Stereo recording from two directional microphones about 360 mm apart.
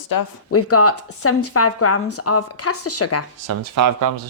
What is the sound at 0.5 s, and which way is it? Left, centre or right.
Speech, left.